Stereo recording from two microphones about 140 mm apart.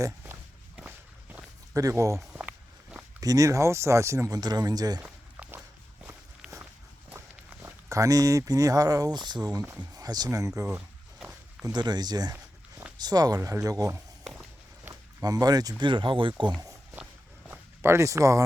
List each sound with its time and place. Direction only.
0.8 s walk: 10° right (ahead or behind)
1.7 s speech: 20° right (ahead or behind)
2.3 s walk: 5° right (ahead or behind)
3.2 s speech: 25° right (ahead or behind)
4.9 s a sound: 10° right (ahead or behind)
6.4 s walk: 5° right (ahead or behind)
7.6 s speech: 25° right (ahead or behind)
10.7 s walk: 5° right (ahead or behind)
11.6 s speech: 30° right (ahead or behind)
15.2 s speech: 25° right (ahead or behind)
17.8 s speech: 20° right (ahead or behind)